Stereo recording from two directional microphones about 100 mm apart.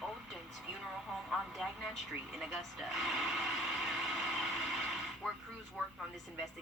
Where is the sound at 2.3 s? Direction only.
5° right (ahead or behind).